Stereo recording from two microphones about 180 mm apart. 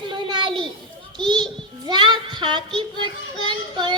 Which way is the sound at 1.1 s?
25° right (ahead or behind).